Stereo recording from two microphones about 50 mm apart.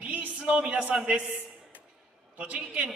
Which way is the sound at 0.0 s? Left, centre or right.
Right.